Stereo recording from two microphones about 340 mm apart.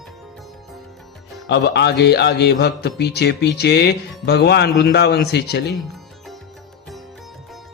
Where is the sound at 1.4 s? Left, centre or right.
Left.